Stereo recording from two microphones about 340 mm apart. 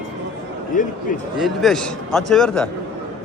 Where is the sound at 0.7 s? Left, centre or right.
Left.